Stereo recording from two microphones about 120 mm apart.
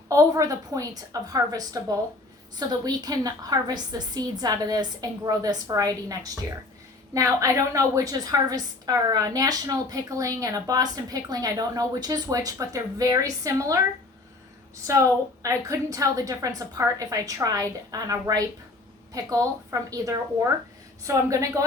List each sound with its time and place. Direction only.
0.1 s a woman's voice: 30° right (ahead or behind)
14.9 s a woman's voice: 25° right (ahead or behind)